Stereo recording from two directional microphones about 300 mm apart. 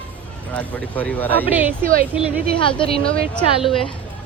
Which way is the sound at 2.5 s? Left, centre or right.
Centre.